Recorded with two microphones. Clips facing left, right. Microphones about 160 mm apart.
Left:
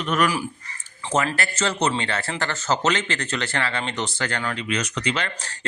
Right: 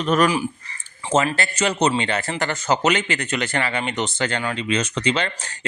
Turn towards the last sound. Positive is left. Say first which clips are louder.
# right 4 dB
turn(degrees=-25)  # may be behind; listen again after turning